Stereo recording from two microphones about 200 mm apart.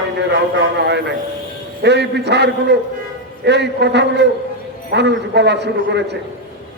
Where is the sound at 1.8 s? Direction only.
55° right (ahead or behind).